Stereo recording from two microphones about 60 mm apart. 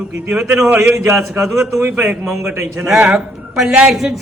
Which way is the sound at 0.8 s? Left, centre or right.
Right.